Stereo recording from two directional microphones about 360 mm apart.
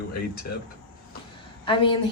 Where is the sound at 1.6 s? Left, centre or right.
Centre.